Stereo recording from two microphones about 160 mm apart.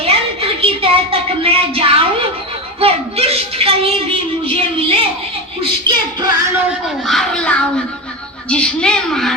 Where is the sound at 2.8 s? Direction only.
40° right (ahead or behind).